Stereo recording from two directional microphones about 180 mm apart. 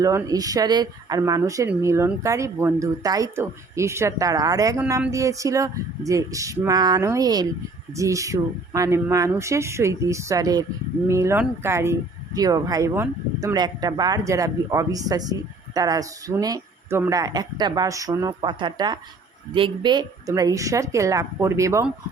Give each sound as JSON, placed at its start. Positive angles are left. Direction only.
{"t": 0.0, "sound": "speech", "side_deg": -20}